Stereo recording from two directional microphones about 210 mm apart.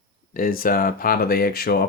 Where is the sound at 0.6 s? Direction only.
45° left (ahead or behind).